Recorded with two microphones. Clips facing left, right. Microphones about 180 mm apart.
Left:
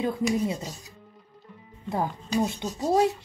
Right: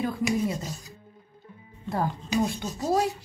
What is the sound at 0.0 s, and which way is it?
Speech, 20° left (ahead or behind).